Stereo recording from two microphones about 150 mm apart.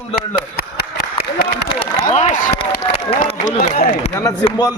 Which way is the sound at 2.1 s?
55° left (ahead or behind).